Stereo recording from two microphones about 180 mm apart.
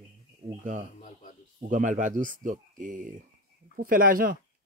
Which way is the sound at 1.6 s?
45° right (ahead or behind).